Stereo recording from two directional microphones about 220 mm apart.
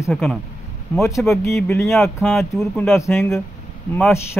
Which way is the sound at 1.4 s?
10° left (ahead or behind).